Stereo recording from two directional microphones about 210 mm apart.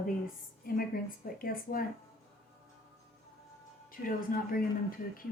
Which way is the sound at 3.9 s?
40° left (ahead or behind).